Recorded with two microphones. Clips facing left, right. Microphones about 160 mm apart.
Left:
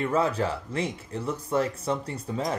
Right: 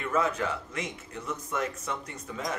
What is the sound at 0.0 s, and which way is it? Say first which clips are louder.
Speech: left 3 dB; 30° left (ahead or behind).